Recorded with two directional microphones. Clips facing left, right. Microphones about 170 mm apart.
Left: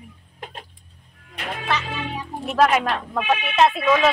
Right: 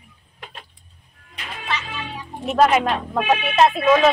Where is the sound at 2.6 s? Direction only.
Centre (ahead or behind).